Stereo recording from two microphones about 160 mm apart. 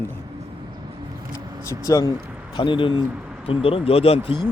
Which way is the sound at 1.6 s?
20° left (ahead or behind).